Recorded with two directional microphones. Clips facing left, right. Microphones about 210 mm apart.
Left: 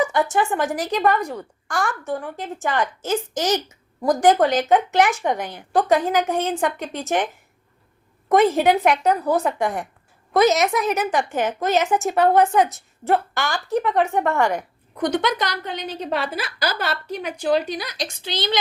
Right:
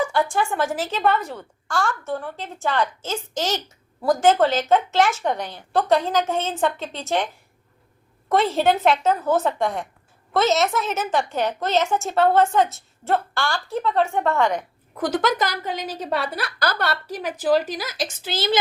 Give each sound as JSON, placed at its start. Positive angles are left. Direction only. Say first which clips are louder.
{"t": 0.0, "sound": "a woman's voice", "louder": "left 2 dB", "side_deg": 20}
{"t": 8.3, "sound": "a woman's voice", "louder": "left 3 dB", "side_deg": 15}
{"t": 14.9, "sound": "a woman's voice", "louder": "even", "side_deg": -5}